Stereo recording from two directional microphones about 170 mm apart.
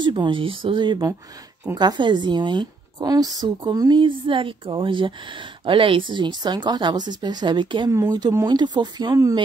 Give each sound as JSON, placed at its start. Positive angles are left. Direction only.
{"t": 0.0, "sound": "speech", "side_deg": -30}